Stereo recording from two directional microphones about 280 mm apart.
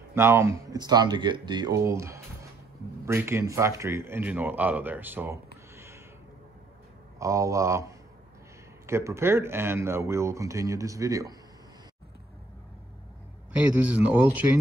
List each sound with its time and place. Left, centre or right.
0.1 s speech: centre
7.2 s speech: centre
13.6 s a man's voice: centre